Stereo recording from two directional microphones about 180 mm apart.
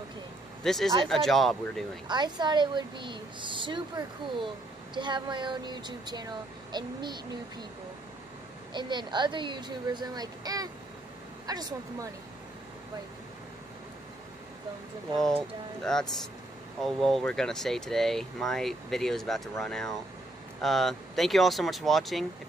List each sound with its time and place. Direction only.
0.7 s speech: centre (ahead or behind)
2.0 s speech: 25° right (ahead or behind)
8.7 s speech: 25° right (ahead or behind)
15.8 s speech: 5° left (ahead or behind)